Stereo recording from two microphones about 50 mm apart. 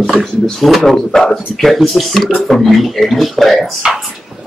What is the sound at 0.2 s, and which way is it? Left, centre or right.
Speech, centre.